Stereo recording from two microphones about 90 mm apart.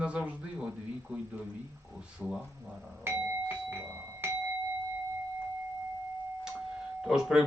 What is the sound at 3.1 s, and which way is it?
Doorbell, 20° right (ahead or behind).